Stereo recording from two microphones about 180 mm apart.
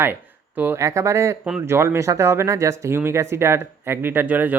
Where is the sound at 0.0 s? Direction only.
10° right (ahead or behind).